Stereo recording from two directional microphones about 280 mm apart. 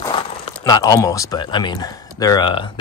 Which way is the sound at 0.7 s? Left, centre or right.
Centre.